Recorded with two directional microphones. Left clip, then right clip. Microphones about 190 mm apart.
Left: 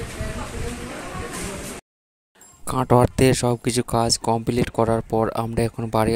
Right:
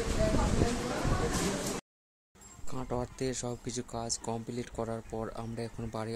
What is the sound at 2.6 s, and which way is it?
Speech, 45° left (ahead or behind).